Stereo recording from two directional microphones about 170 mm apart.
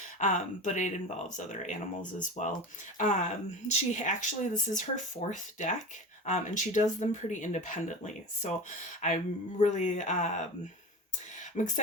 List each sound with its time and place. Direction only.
0.2 s speech: 45° left (ahead or behind)
11.5 s speech: 45° left (ahead or behind)